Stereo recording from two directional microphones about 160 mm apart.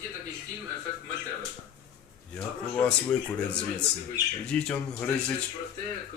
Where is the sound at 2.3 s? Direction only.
5° left (ahead or behind).